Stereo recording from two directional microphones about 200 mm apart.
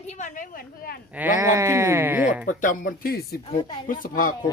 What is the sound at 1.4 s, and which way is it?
Speech, 15° right (ahead or behind).